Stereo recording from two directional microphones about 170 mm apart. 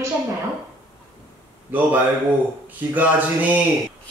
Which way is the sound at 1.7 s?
10° right (ahead or behind).